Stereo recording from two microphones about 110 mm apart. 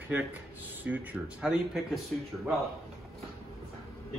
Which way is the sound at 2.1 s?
10° left (ahead or behind).